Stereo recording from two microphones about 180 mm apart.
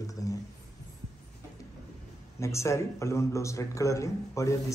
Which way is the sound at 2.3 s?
15° left (ahead or behind).